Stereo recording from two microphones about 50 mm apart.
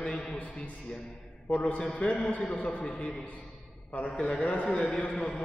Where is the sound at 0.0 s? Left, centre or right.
Centre.